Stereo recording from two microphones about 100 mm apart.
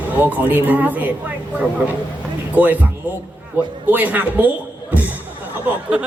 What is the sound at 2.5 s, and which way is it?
Speech, 15° right (ahead or behind).